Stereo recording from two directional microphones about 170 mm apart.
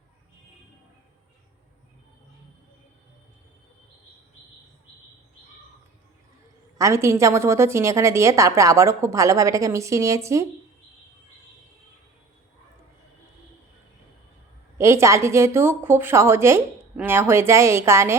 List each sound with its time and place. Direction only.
6.7 s a woman's voice: 15° right (ahead or behind)
14.8 s a woman's voice: 15° right (ahead or behind)